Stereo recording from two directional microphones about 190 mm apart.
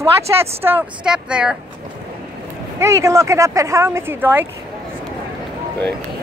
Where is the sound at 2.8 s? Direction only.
15° right (ahead or behind).